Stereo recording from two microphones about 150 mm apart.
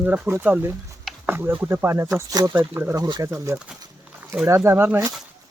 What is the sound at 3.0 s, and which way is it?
Speech, 25° right (ahead or behind).